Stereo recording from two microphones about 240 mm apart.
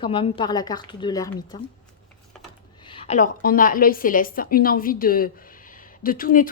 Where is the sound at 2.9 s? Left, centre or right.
Left.